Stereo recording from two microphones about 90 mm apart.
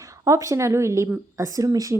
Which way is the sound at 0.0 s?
35° right (ahead or behind).